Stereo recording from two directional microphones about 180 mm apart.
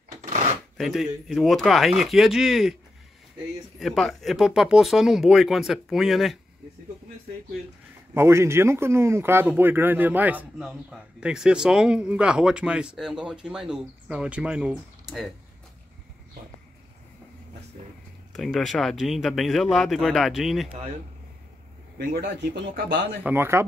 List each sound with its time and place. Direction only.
0.2 s drawer open or close: 40° right (ahead or behind)
0.7 s a man's voice: centre (ahead or behind)
3.8 s a man's voice: centre (ahead or behind)
8.1 s a man's voice: 15° right (ahead or behind)
18.3 s a man's voice: centre (ahead or behind)
21.9 s speech: 65° right (ahead or behind)
23.2 s speech: 15° right (ahead or behind)